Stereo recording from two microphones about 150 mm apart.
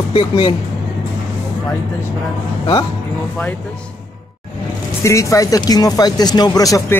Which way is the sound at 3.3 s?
10° left (ahead or behind).